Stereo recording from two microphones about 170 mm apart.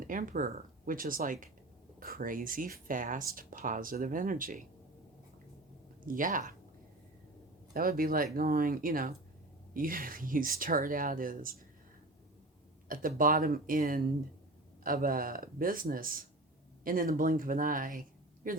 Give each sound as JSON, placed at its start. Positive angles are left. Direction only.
{"t": 0.0, "sound": "speech", "side_deg": -50}
{"t": 6.1, "sound": "speech", "side_deg": -50}
{"t": 7.7, "sound": "speech", "side_deg": -55}
{"t": 12.9, "sound": "a man's voice", "side_deg": -55}